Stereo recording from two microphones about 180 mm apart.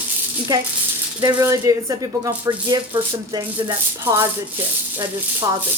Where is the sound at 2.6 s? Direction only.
20° right (ahead or behind).